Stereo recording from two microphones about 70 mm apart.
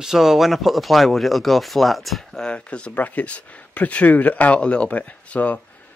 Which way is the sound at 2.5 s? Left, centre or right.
Centre.